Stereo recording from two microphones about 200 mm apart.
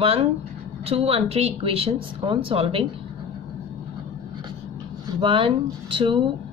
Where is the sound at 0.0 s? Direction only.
30° right (ahead or behind).